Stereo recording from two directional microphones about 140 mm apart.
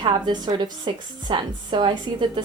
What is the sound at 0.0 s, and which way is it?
A woman's voice, 30° right (ahead or behind).